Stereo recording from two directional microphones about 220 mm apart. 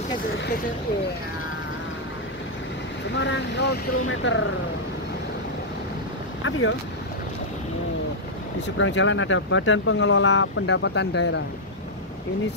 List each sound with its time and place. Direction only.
3.2 s speech: 55° left (ahead or behind)
8.7 s speech: 60° left (ahead or behind)